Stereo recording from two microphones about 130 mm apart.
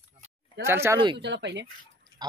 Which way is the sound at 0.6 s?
20° right (ahead or behind).